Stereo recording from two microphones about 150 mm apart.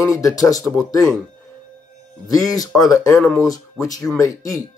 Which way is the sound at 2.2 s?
25° left (ahead or behind).